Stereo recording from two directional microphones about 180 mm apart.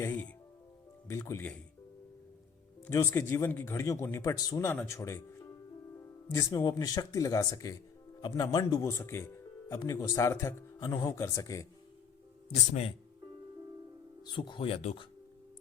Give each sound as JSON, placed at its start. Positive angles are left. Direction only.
{"t": 0.0, "sound": "music", "side_deg": 10}
{"t": 1.0, "sound": "speech", "side_deg": 15}
{"t": 2.8, "sound": "speech", "side_deg": 15}
{"t": 14.2, "sound": "speech", "side_deg": 25}